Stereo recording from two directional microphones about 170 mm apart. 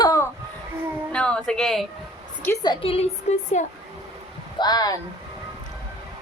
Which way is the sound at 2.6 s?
30° left (ahead or behind).